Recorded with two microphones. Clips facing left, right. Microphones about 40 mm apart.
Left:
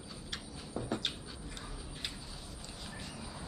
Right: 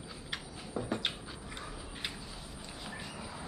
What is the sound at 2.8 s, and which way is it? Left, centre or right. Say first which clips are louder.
Train: right 3 dB; centre.